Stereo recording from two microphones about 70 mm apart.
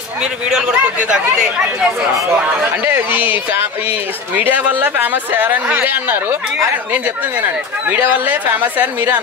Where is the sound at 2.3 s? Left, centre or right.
Centre.